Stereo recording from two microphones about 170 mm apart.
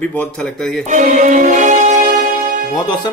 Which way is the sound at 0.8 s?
45° right (ahead or behind).